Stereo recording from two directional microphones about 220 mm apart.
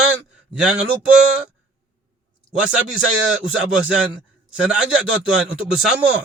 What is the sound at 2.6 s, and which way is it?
Speech, 5° right (ahead or behind).